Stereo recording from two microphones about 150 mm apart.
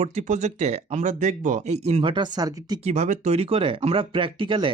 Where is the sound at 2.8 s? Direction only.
55° right (ahead or behind); by 4.7 s 35° right (ahead or behind).